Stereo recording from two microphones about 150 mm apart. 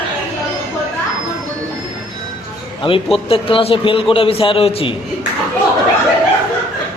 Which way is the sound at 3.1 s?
35° left (ahead or behind).